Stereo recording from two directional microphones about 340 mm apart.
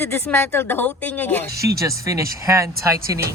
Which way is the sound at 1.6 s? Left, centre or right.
Centre.